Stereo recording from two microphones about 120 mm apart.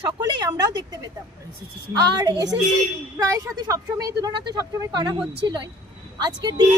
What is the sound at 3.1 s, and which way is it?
Speech, 25° right (ahead or behind).